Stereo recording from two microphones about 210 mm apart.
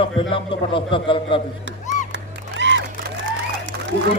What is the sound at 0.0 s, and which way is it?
A man's voice, 25° left (ahead or behind).